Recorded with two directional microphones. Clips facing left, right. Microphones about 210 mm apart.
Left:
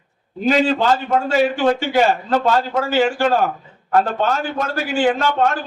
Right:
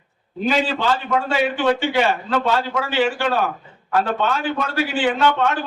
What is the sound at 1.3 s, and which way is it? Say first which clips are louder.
A man's voice: left 3 dB; 45° left (ahead or behind).